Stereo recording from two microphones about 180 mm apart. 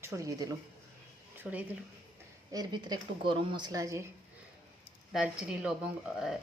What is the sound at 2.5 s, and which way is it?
Speech, 20° right (ahead or behind).